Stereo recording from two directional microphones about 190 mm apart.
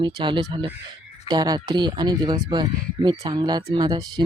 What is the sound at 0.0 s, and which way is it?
Speech, 25° right (ahead or behind).